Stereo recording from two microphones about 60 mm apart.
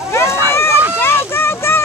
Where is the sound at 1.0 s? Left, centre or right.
Left.